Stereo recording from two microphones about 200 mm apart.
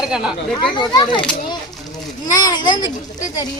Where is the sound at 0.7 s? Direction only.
25° left (ahead or behind).